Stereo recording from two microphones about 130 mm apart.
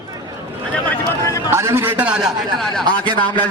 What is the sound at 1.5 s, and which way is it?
A man's voice, 20° right (ahead or behind).